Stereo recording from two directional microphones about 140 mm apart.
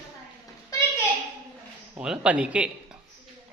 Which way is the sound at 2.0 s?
5° right (ahead or behind).